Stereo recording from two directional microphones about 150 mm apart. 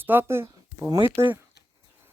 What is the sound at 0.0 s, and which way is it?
Speech, 15° right (ahead or behind).